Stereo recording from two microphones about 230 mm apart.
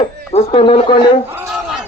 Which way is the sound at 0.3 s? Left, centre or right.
Left.